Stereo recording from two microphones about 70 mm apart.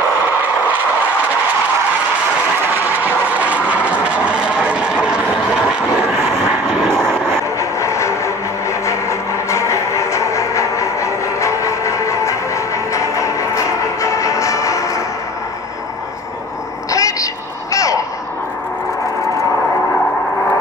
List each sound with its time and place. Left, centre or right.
0.3 s vehicle: right
3.0 s vehicle: right
6.9 s vehicle: centre
7.5 s vehicle: left
16.9 s a sound: left